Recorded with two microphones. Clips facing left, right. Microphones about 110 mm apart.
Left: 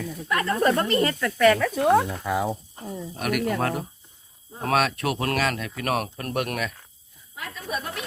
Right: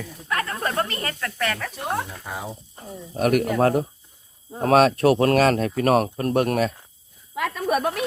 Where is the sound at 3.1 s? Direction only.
35° right (ahead or behind).